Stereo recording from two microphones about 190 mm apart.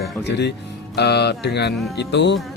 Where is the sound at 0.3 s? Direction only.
60° left (ahead or behind).